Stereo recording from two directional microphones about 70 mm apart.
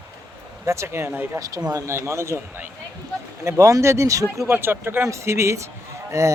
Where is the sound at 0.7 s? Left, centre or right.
Right.